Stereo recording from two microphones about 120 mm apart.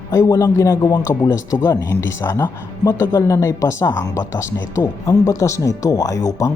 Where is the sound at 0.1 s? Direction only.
30° left (ahead or behind).